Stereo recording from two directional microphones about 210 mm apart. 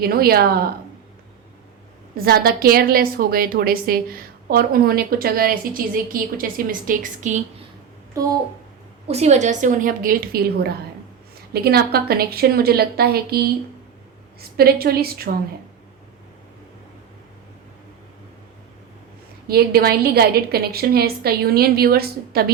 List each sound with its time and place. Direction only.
0.0 s a woman's voice: 45° right (ahead or behind)
2.1 s a woman's voice: 45° right (ahead or behind)
8.1 s a child's voice: 15° right (ahead or behind)
9.0 s a woman's voice: 30° right (ahead or behind); by 13.4 s 50° right (ahead or behind)
14.5 s a woman's voice: 45° right (ahead or behind)
19.5 s a woman's voice: 50° right (ahead or behind)